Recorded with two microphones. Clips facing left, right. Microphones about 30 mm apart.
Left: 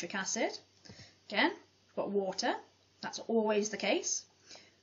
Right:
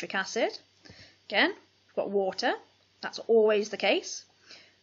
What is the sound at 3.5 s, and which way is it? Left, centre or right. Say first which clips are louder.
Speech: right 6 dB; right.